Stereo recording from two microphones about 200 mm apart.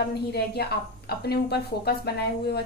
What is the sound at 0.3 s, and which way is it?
A woman's voice, 50° left (ahead or behind).